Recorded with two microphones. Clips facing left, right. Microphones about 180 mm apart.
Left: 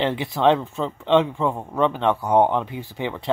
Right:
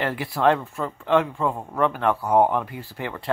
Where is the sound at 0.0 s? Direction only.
20° left (ahead or behind).